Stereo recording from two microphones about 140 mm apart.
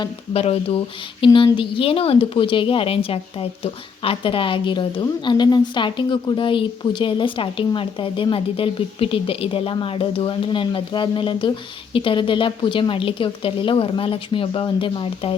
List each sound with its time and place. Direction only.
0.3 s a woman's voice: 45° left (ahead or behind)